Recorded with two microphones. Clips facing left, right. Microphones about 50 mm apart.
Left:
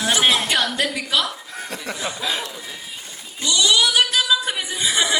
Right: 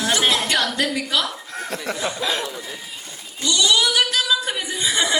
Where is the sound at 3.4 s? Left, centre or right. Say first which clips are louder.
Even; left.